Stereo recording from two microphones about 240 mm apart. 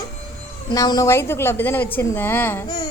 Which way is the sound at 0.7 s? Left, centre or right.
Centre.